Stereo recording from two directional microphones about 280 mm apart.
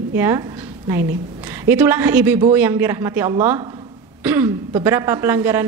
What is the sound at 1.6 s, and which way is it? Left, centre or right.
A woman's voice, centre.